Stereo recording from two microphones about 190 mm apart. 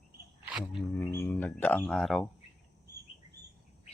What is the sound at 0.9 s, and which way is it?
Speech, 15° left (ahead or behind).